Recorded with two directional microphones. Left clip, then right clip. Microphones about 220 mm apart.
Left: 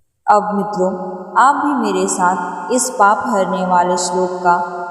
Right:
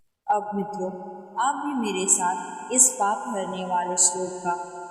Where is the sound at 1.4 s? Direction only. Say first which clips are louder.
Left 13 dB; 25° left (ahead or behind).